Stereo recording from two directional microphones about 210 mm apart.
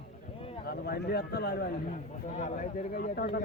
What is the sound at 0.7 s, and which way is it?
Speech, 50° left (ahead or behind).